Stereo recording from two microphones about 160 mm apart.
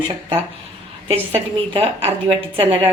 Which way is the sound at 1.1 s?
40° right (ahead or behind).